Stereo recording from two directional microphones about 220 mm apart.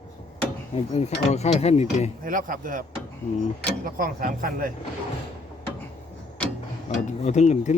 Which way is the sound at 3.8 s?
40° right (ahead or behind).